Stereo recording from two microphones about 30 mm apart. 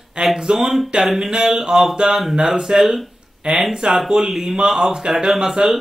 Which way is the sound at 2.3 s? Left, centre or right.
Right.